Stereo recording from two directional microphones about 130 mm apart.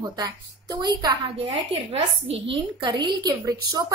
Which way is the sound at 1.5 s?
50° right (ahead or behind).